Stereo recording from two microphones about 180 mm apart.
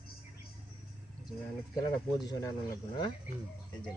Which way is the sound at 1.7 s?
20° left (ahead or behind).